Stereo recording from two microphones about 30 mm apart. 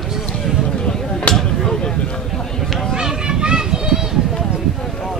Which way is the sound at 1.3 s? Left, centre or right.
Left.